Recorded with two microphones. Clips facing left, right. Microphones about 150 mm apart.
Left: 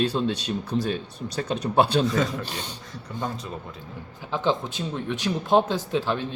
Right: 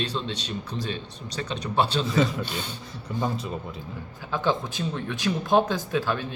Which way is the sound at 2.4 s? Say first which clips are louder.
Right 2 dB; 40° left (ahead or behind).